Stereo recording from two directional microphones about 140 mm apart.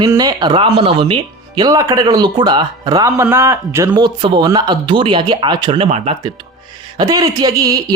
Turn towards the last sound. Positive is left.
turn(degrees=-25)  # may be behind; listen again after turning